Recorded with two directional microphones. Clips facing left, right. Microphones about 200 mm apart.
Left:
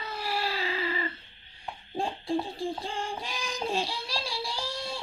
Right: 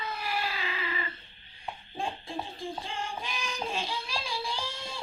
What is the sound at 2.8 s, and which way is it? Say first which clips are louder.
Child singing: left 2 dB; 35° left (ahead or behind).